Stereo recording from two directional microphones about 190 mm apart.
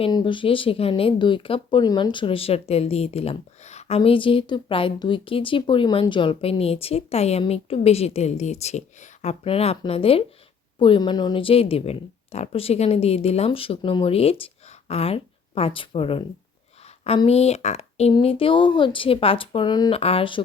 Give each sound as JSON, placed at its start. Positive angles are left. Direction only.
{"t": 0.0, "sound": "a woman's voice", "side_deg": 25}